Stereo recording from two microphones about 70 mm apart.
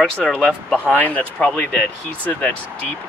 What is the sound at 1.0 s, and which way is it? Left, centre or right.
Speech, centre.